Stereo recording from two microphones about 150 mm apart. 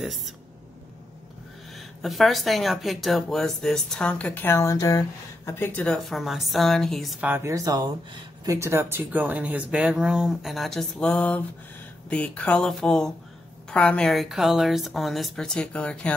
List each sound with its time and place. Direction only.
0.0 s a sound: centre (ahead or behind)
2.0 s speech: centre (ahead or behind)
7.2 s speech: 15° right (ahead or behind)
8.5 s speech: 15° right (ahead or behind); by 16.1 s 10° left (ahead or behind)